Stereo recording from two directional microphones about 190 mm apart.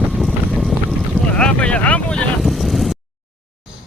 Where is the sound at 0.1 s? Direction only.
Centre (ahead or behind).